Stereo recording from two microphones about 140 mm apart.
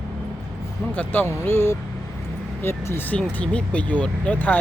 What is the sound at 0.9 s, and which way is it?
Speech, 15° left (ahead or behind).